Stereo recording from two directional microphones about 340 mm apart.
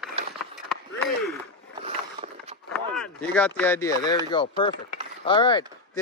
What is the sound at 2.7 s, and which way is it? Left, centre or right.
Speech, centre.